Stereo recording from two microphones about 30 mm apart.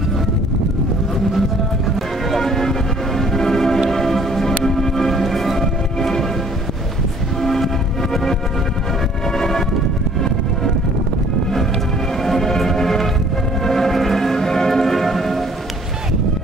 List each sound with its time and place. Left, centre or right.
2.3 s a sound: centre
3.2 s music: centre
7.4 s music: centre
9.4 s music: centre
12.3 s music: centre